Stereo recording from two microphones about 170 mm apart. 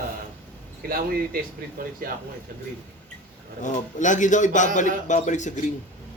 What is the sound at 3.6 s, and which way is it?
A man's voice, 45° left (ahead or behind).